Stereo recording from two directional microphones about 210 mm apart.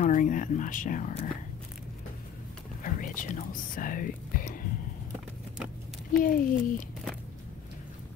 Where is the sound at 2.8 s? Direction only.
40° left (ahead or behind).